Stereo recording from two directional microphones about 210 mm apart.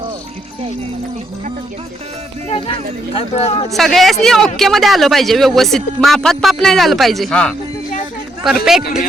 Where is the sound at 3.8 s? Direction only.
Centre (ahead or behind).